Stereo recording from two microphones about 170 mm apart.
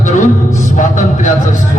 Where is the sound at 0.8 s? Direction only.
45° left (ahead or behind).